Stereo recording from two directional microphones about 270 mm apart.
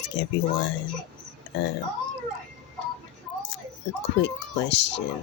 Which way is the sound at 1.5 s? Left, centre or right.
Left.